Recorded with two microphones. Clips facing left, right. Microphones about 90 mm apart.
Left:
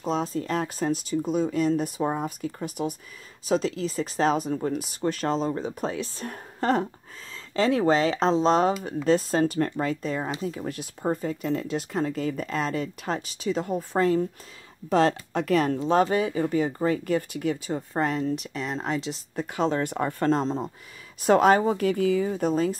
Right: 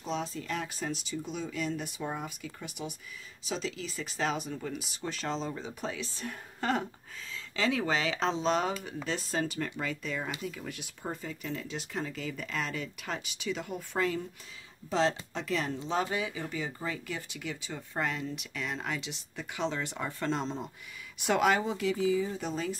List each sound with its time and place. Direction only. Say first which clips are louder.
0.0 s speech: left 8 dB; 45° left (ahead or behind)
14.9 s speech: left 7 dB; 55° left (ahead or behind)